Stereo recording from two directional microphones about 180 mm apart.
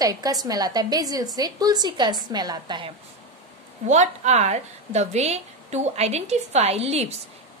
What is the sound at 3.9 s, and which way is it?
A woman's voice, 40° right (ahead or behind).